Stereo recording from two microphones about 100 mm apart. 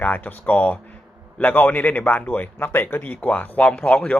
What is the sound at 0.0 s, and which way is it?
A man's voice, 20° left (ahead or behind).